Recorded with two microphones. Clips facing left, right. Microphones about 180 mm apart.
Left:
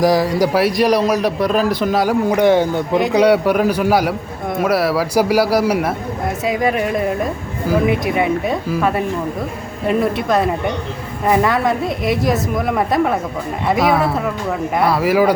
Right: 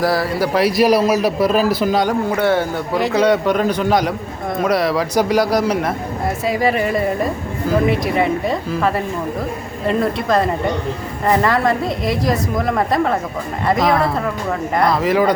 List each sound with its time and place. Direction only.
0.0 s a man's voice: 15° left (ahead or behind)
0.6 s a woman's voice: 5° right (ahead or behind)
2.3 s a man's voice: 15° left (ahead or behind)